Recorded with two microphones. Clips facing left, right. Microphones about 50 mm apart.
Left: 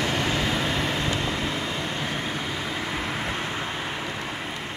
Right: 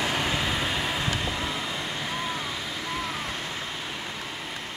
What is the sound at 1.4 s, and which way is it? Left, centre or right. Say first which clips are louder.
Vehicle: left 2 dB; left.